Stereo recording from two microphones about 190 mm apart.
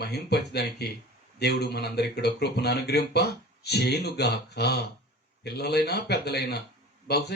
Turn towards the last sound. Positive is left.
turn(degrees=60)  # may be behind; listen again after turning